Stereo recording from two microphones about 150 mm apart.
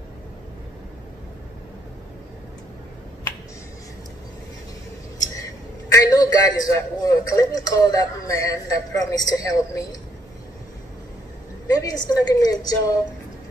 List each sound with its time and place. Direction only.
5.9 s a man's voice: 25° left (ahead or behind)
11.6 s a man's voice: 25° left (ahead or behind)